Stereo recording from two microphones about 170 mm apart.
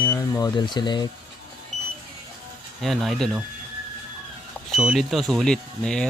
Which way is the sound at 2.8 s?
Centre (ahead or behind).